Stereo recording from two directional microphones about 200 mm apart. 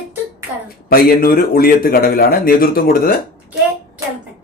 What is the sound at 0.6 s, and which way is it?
Speech, 50° left (ahead or behind).